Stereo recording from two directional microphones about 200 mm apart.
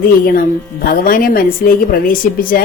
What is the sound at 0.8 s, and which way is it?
Speech, 45° left (ahead or behind).